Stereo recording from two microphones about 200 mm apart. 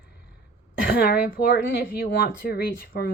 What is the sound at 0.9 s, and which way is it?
Speech, 45° left (ahead or behind).